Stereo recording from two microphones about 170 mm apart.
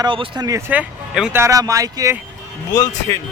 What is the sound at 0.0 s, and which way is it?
Speech, 25° right (ahead or behind).